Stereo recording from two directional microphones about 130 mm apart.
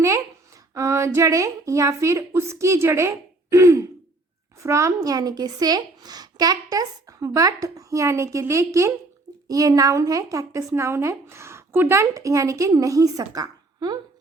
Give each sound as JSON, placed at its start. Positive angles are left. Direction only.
{"t": 0.7, "sound": "speech", "side_deg": -20}